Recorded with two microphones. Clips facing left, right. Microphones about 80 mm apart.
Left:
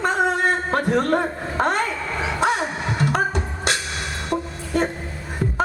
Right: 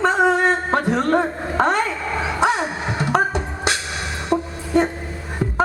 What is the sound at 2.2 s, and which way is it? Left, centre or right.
Beatboxing, right.